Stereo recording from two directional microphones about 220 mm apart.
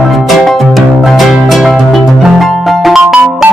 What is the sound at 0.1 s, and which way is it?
Music, centre (ahead or behind).